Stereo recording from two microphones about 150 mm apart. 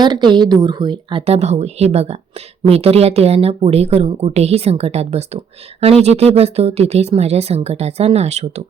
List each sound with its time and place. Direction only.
0.0 s a woman's voice: 30° right (ahead or behind)
1.2 s speech: 45° right (ahead or behind)